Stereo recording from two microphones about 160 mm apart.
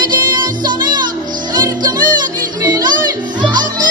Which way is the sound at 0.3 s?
25° right (ahead or behind).